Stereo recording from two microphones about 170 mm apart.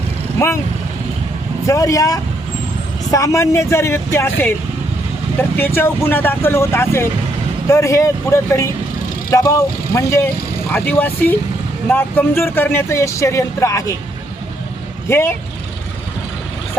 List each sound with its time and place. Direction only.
0.3 s speech: 15° left (ahead or behind)
1.6 s speech: 20° left (ahead or behind)
9.9 s speech: 15° left (ahead or behind)
15.1 s speech: 15° left (ahead or behind)